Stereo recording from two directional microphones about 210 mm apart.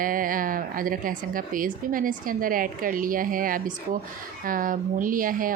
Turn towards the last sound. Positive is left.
turn(degrees=-40)  # may be behind; listen again after turning